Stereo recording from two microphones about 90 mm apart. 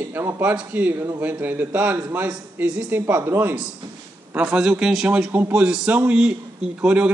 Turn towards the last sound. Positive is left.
turn(degrees=-15)  # may be behind; listen again after turning